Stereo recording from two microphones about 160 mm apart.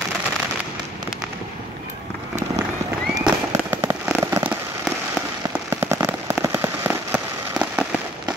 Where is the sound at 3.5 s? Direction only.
15° right (ahead or behind).